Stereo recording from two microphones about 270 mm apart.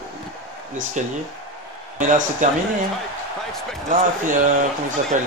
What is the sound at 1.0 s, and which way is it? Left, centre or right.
Speech, right.